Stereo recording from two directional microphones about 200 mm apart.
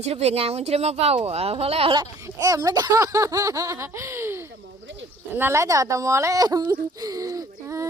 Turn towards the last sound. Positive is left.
turn(degrees=-15)  # may be behind; listen again after turning